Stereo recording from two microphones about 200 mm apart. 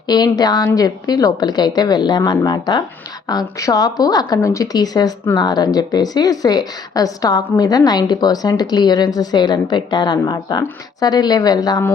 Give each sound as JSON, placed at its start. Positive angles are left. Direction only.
{"t": 0.1, "sound": "a woman's voice", "side_deg": 20}